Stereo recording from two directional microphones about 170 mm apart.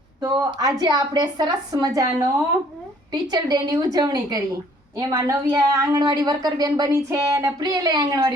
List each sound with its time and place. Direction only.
0.2 s a woman's voice: 20° right (ahead or behind)